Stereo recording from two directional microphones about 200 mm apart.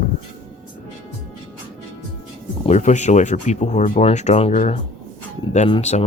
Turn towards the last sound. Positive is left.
turn(degrees=30)  # may be behind; listen again after turning